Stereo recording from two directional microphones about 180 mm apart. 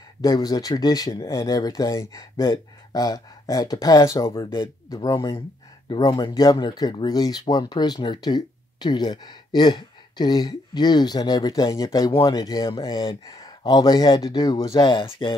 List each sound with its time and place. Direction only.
0.2 s speech: 20° left (ahead or behind)